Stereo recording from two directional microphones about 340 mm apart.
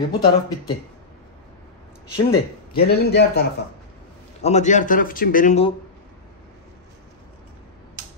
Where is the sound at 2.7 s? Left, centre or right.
Left.